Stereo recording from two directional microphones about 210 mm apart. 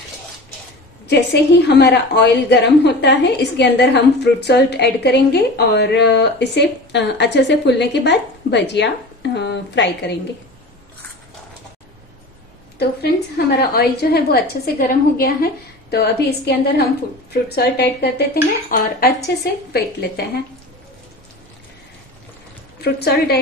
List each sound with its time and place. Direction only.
1.0 s a woman's voice: 50° left (ahead or behind)
13.6 s a woman's voice: 50° left (ahead or behind)
22.8 s a woman's voice: 50° left (ahead or behind)